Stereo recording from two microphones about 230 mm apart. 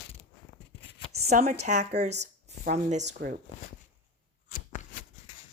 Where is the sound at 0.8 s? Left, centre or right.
Left.